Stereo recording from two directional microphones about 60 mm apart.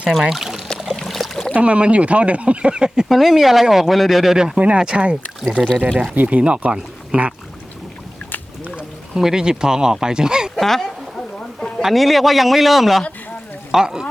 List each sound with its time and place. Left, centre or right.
0.2 s speech: centre
0.9 s a sound: centre
1.5 s speech: centre
3.1 s speech: centre
5.6 s speech: centre
6.0 s speech: right
9.1 s speech: centre
10.5 s speech: centre